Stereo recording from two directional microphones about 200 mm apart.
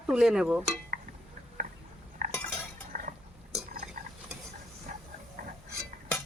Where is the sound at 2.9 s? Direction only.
40° right (ahead or behind).